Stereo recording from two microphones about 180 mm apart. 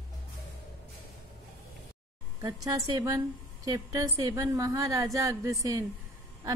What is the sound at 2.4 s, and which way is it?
A woman's voice, 20° right (ahead or behind).